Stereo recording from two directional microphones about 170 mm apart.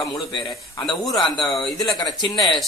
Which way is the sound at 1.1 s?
25° left (ahead or behind).